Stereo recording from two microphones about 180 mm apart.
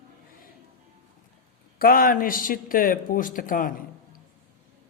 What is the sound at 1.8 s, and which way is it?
Speech, 55° left (ahead or behind).